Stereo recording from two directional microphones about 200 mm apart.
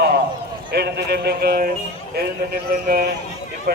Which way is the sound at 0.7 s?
55° right (ahead or behind).